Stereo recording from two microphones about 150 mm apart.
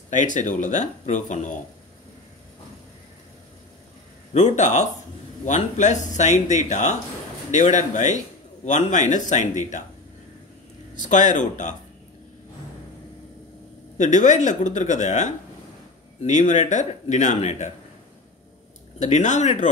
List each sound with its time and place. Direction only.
0.1 s speech: 55° left (ahead or behind)
4.3 s speech: 50° left (ahead or behind)
11.0 s speech: 55° left (ahead or behind)
13.9 s speech: 55° left (ahead or behind)
18.9 s speech: 50° left (ahead or behind)